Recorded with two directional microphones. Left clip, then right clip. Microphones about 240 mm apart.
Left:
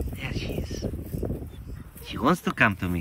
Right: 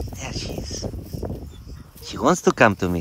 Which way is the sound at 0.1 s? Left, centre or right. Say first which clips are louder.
Right 3 dB; centre.